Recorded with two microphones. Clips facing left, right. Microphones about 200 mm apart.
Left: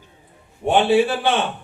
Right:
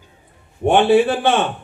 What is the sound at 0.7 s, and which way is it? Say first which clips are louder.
Speech: right 3 dB; 50° right (ahead or behind).